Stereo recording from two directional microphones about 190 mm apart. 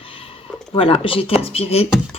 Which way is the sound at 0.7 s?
30° left (ahead or behind).